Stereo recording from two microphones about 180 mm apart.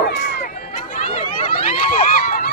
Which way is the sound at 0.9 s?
45° left (ahead or behind).